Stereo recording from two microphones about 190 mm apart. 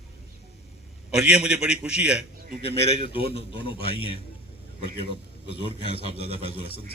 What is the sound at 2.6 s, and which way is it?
A man's voice, 30° left (ahead or behind).